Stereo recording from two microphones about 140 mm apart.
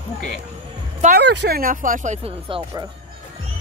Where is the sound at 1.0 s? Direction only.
90° right; by 2.1 s 70° right (ahead or behind).